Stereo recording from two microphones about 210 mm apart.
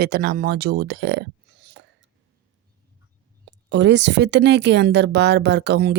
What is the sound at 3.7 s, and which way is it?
Speech, 55° right (ahead or behind).